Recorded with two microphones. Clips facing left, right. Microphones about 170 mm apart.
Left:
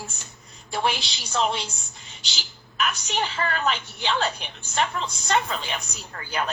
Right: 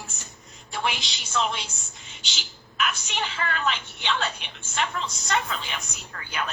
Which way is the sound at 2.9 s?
35° left (ahead or behind).